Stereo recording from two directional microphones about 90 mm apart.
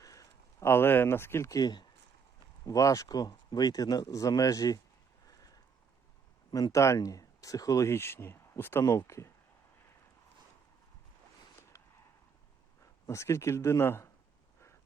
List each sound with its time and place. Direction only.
0.0 s a sound: 40° left (ahead or behind)
0.7 s speech: 25° left (ahead or behind)
1.5 s speech: 50° left (ahead or behind)
2.6 s speech: 40° left (ahead or behind)
5.2 s a sound: 45° left (ahead or behind)
6.5 s speech: 40° left (ahead or behind); by 8.8 s 25° left (ahead or behind)
8.8 s speech: 35° left (ahead or behind)
11.7 s a sound: 35° left (ahead or behind)
12.8 s a man's voice: 35° left (ahead or behind)